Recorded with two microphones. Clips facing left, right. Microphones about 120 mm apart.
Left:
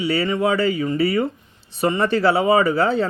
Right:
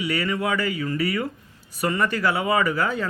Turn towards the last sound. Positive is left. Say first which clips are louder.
# left 5 dB
turn(degrees=30)  # may be behind; listen again after turning